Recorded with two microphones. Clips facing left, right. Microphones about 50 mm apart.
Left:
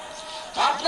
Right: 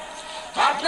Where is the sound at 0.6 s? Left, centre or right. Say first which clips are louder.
Right 2 dB; centre.